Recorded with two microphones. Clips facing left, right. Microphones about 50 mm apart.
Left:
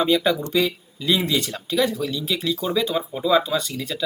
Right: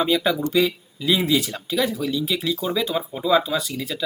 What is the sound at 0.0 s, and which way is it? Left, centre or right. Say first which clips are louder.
Speech: left 1 dB; centre.